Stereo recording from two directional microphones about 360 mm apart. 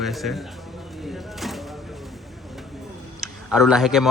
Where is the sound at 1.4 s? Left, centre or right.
Centre.